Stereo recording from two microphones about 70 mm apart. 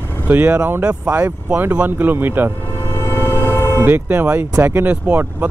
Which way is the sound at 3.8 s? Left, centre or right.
Right.